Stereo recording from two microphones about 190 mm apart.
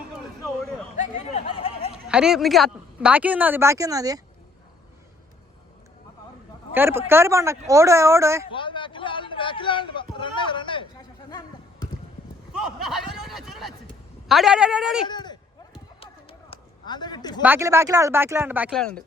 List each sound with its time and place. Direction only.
0.9 s speech: 35° left (ahead or behind)
2.0 s speech: 5° right (ahead or behind)
6.7 s speech: 10° right (ahead or behind)
8.4 s speech: 25° left (ahead or behind)
12.5 s a sound: centre (ahead or behind)
14.3 s speech: centre (ahead or behind)
15.0 s speech: 25° left (ahead or behind)
16.5 s a sound: 25° left (ahead or behind)
17.4 s speech: 10° right (ahead or behind)
18.7 s speech: 5° left (ahead or behind)